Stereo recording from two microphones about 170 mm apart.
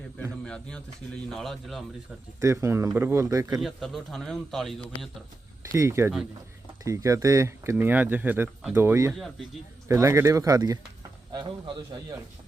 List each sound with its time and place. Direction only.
0.2 s speech: 5° left (ahead or behind)
2.4 s speech: 15° right (ahead or behind)
3.6 s speech: centre (ahead or behind)
5.7 s speech: 15° right (ahead or behind)